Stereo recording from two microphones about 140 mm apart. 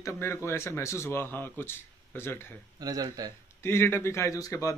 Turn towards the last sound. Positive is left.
turn(degrees=20)  # may be behind; listen again after turning